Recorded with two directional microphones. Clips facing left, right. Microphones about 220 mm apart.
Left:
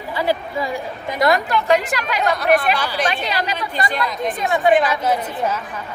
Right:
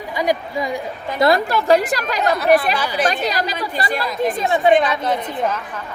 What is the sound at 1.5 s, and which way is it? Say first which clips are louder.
Speech: right 2 dB; 35° right (ahead or behind).